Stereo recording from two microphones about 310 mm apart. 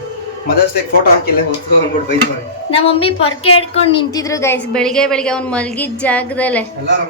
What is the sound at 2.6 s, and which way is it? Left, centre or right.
A woman's voice, centre.